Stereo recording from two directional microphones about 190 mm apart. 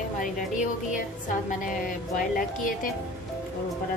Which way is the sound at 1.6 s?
45° left (ahead or behind).